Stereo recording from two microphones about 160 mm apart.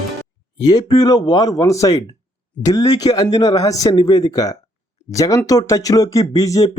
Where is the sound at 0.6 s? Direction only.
25° left (ahead or behind).